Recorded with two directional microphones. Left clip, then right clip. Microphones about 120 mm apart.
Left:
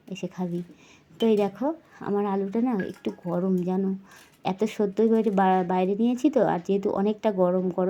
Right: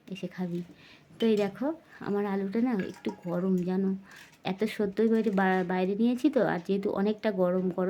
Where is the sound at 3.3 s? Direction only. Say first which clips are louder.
Left 4 dB; 10° right (ahead or behind).